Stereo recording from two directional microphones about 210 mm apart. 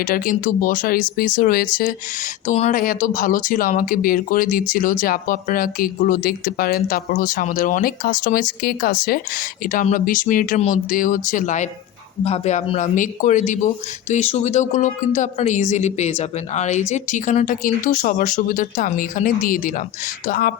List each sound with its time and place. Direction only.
0.0 s speech: 40° left (ahead or behind)